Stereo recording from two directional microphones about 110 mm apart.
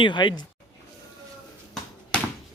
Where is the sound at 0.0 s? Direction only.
45° left (ahead or behind).